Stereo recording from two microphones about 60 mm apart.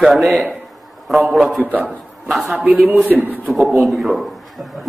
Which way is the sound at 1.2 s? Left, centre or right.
Centre.